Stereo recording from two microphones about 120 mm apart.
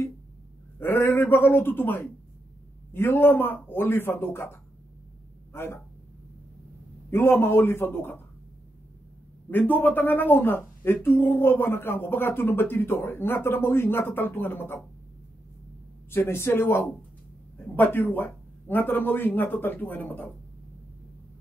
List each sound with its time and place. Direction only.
0.7 s speech: 20° left (ahead or behind)
7.1 s a man's voice: 20° left (ahead or behind)
9.5 s speech: 15° left (ahead or behind)
16.1 s a man's voice: 20° left (ahead or behind)